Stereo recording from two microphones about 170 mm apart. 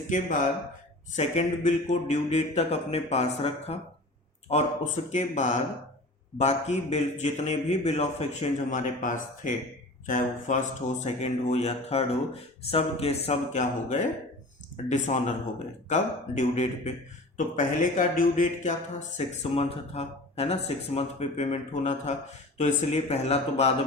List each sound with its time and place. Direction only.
0.1 s speech: 50° left (ahead or behind)